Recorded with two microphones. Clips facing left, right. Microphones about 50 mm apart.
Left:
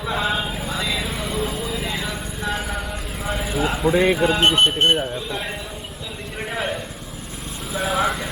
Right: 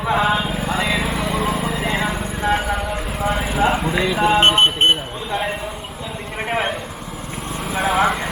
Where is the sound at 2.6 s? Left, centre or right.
Right.